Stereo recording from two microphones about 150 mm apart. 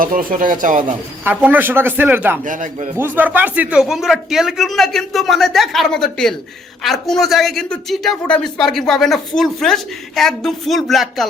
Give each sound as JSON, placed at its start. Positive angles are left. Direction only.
{"t": 0.0, "sound": "speech", "side_deg": -65}
{"t": 1.2, "sound": "speech", "side_deg": -10}
{"t": 2.4, "sound": "speech", "side_deg": -60}
{"t": 3.0, "sound": "speech", "side_deg": -10}